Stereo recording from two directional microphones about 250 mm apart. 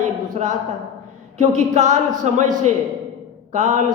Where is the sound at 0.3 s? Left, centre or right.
Right.